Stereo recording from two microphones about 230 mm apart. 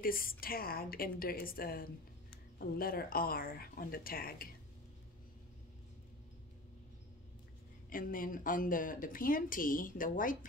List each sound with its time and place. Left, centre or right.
0.0 s speech: left
7.9 s speech: left